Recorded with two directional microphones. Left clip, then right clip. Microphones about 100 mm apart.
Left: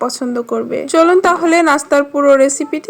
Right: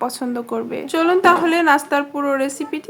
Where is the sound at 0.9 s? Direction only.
50° left (ahead or behind).